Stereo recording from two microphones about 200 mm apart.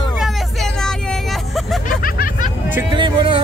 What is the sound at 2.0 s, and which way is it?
Music, 45° left (ahead or behind).